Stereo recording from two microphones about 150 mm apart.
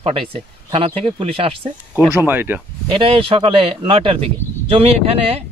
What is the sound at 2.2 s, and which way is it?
Speech, 15° right (ahead or behind).